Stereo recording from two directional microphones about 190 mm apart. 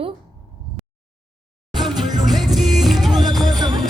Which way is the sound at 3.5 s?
20° right (ahead or behind).